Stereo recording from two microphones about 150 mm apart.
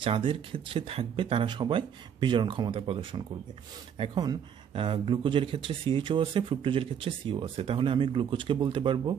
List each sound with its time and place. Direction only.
0.0 s speech: 35° right (ahead or behind)